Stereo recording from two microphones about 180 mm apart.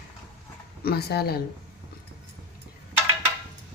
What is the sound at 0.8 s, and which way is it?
Speech, 60° left (ahead or behind).